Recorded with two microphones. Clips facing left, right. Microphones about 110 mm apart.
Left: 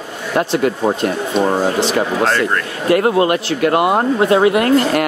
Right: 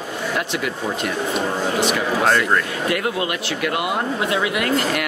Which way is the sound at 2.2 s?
5° right (ahead or behind).